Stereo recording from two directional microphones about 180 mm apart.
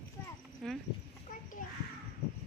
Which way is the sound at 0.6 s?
5° left (ahead or behind).